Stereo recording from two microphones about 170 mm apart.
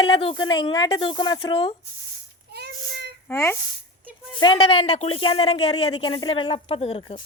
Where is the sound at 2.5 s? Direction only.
75° right (ahead or behind).